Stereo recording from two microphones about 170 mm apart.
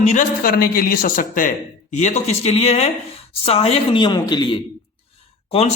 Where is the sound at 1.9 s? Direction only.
45° left (ahead or behind); by 4.5 s 25° left (ahead or behind).